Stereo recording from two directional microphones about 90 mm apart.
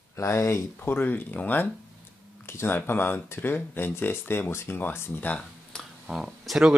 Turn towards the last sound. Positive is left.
turn(degrees=-5)  # may be behind; listen again after turning